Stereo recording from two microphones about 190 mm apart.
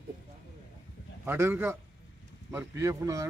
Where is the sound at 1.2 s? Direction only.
10° right (ahead or behind).